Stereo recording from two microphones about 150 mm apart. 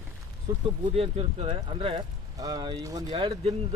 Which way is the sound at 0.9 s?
40° right (ahead or behind).